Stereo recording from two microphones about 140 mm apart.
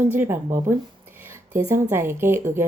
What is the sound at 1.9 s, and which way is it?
Speech, 20° right (ahead or behind).